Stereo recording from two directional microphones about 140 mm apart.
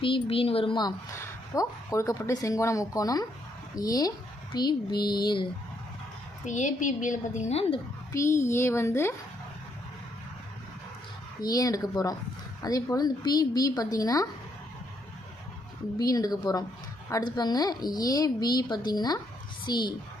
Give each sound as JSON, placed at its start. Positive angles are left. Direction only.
{"t": 0.0, "sound": "a woman's voice", "side_deg": 40}
{"t": 6.4, "sound": "a woman's voice", "side_deg": 65}
{"t": 8.1, "sound": "a woman's voice", "side_deg": 20}
{"t": 11.3, "sound": "a woman's voice", "side_deg": 25}
{"t": 16.0, "sound": "a woman's voice", "side_deg": 25}